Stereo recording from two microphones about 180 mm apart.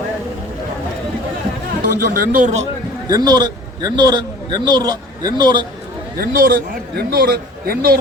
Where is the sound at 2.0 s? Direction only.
50° right (ahead or behind).